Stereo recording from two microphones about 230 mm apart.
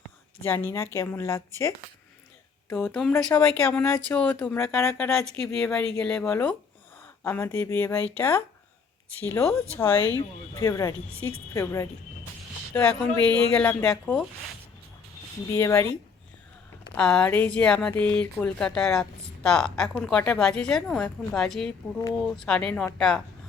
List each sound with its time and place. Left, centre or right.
0.4 s speech: centre
11.1 s a woman's voice: right
11.5 s speech: centre
15.5 s speech: centre
17.0 s speech: centre